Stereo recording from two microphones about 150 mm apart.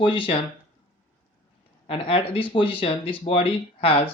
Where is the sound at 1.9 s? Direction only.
35° left (ahead or behind).